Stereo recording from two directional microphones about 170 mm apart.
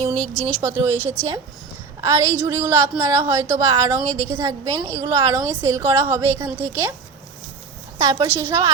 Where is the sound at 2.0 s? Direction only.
20° right (ahead or behind).